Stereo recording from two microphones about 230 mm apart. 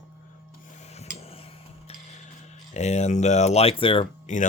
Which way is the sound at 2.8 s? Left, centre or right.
Left.